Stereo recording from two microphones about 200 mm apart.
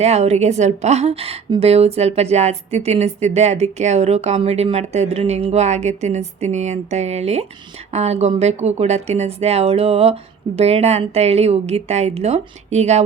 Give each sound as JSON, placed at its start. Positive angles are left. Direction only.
{"t": 0.0, "sound": "a woman's voice", "side_deg": -30}